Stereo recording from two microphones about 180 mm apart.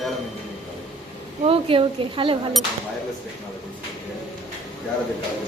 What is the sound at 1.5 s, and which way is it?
Speech, 30° right (ahead or behind).